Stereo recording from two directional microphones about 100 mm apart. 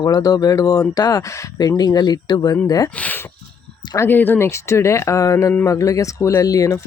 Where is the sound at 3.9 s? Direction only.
25° left (ahead or behind).